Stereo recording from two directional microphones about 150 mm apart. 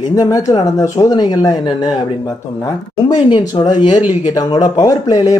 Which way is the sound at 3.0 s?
25° left (ahead or behind).